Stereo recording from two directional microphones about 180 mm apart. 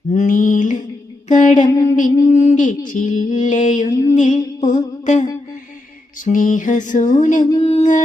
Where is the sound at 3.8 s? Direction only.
20° left (ahead or behind).